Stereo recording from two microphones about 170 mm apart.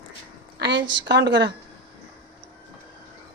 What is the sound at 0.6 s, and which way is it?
Speech, 90° right.